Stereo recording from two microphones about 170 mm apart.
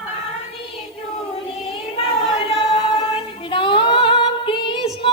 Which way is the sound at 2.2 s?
30° left (ahead or behind).